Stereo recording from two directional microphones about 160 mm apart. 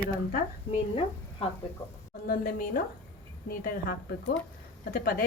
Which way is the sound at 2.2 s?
60° left (ahead or behind).